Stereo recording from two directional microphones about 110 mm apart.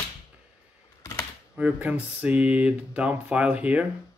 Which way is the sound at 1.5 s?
10° right (ahead or behind).